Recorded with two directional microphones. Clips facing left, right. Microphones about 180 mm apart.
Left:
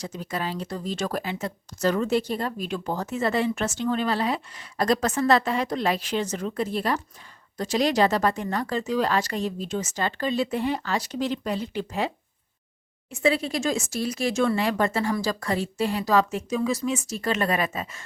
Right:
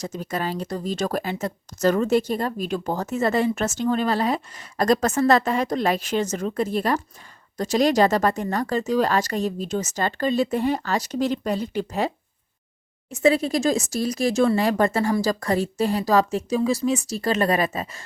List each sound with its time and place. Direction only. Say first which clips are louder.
0.0 s speech: right 3 dB; 45° right (ahead or behind)